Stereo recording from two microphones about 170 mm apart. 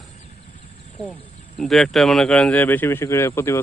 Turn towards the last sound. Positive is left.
turn(degrees=15)  # may be behind; listen again after turning